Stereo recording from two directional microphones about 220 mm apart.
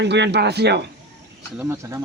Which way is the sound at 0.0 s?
50° right (ahead or behind).